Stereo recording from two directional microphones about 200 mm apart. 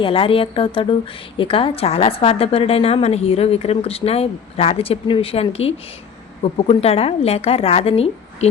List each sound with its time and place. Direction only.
0.0 s a woman's voice: 25° left (ahead or behind)